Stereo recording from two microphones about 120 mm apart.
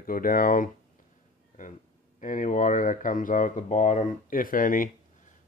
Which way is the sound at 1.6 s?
90° left.